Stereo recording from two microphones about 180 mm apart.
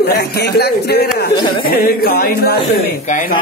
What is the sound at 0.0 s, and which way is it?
A man's voice, 60° left (ahead or behind).